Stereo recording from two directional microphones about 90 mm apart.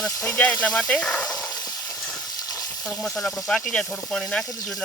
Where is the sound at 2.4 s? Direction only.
45° left (ahead or behind).